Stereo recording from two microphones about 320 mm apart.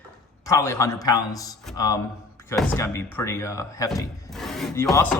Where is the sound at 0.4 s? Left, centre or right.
Centre.